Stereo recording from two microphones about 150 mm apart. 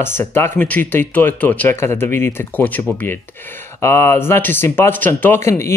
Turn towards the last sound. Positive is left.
turn(degrees=15)  # may be behind; listen again after turning